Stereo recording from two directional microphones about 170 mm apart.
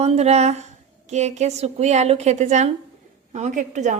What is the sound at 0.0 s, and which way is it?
A woman's voice, 40° right (ahead or behind).